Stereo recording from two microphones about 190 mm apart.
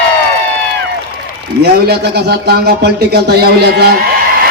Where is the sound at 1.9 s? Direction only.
55° right (ahead or behind).